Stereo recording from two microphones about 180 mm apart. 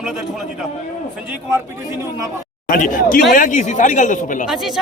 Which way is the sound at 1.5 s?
15° right (ahead or behind).